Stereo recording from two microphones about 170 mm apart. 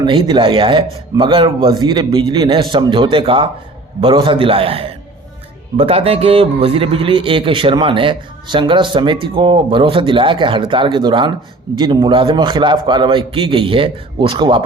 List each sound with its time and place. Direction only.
0.0 s a man's voice: 30° right (ahead or behind)